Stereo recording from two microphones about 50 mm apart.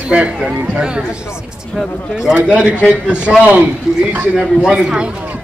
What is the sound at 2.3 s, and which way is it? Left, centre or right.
A man's voice, right.